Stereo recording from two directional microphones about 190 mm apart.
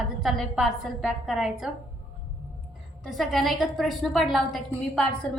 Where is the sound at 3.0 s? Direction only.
Centre (ahead or behind).